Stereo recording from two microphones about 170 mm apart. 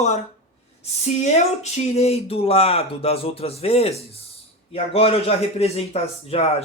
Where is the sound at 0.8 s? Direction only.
40° left (ahead or behind).